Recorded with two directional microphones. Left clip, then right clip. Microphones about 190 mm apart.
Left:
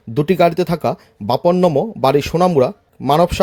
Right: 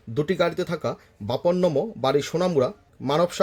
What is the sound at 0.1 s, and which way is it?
Speech, 40° left (ahead or behind).